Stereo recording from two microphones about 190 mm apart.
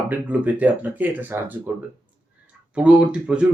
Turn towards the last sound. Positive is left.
turn(degrees=-5)  # may be behind; listen again after turning